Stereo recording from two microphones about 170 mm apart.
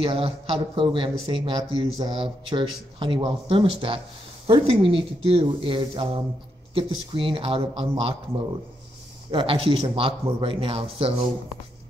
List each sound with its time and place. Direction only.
0.0 s speech: 30° right (ahead or behind)
9.3 s speech: 30° right (ahead or behind)